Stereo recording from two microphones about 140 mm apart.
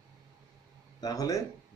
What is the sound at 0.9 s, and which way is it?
Speech, 25° left (ahead or behind).